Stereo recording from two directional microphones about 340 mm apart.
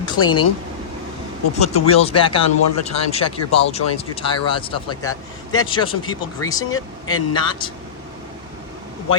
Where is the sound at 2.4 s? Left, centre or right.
Left.